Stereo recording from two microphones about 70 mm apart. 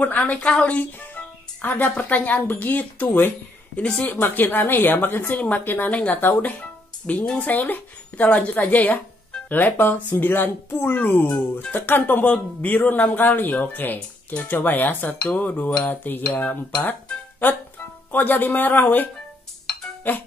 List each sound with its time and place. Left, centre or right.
0.0 s a woman's voice: left
4.1 s speech: left
7.2 s speech: left
20.1 s speech: left